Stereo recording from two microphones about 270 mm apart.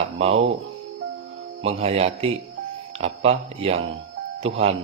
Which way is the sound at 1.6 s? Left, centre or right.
Right.